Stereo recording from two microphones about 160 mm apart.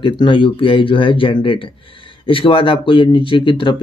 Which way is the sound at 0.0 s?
30° left (ahead or behind).